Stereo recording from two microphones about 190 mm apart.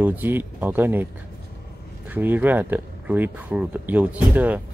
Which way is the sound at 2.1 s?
10° right (ahead or behind).